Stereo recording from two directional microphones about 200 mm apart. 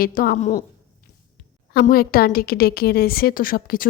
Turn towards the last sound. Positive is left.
turn(degrees=45)  # may be behind; listen again after turning